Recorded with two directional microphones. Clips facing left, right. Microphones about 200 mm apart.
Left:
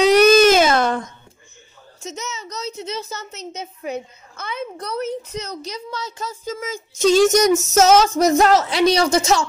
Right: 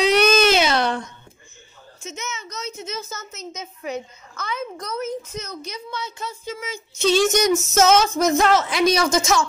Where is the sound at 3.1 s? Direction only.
65° left (ahead or behind).